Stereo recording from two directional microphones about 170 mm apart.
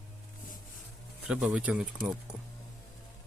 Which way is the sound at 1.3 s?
5° right (ahead or behind).